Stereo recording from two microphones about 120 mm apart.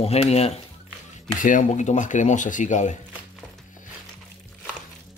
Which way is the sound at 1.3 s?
90° left.